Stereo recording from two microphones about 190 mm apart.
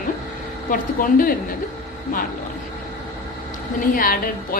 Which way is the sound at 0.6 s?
45° left (ahead or behind).